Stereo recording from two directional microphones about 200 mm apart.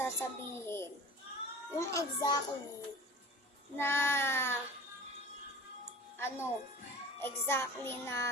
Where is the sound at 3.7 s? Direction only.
10° left (ahead or behind).